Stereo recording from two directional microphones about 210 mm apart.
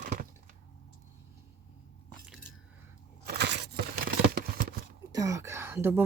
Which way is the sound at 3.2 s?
50° right (ahead or behind).